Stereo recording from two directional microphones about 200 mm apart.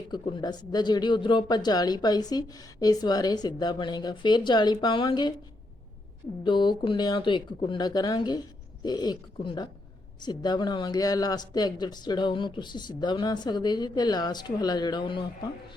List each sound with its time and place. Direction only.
0.1 s speech: 20° left (ahead or behind)
6.4 s speech: 25° left (ahead or behind)